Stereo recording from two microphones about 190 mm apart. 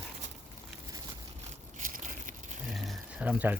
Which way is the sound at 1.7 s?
45° right (ahead or behind).